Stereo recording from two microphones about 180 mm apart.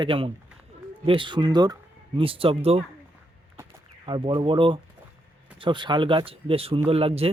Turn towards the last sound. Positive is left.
turn(degrees=-35)  # may be behind; listen again after turning